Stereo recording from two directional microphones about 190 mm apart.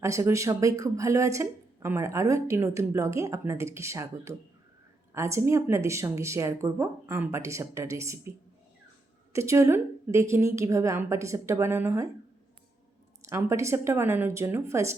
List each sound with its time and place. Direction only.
0.0 s speech: 15° right (ahead or behind)
9.3 s speech: 15° right (ahead or behind)
13.2 s speech: 15° right (ahead or behind)